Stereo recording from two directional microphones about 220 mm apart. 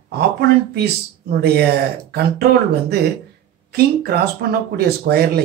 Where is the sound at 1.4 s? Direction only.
45° right (ahead or behind).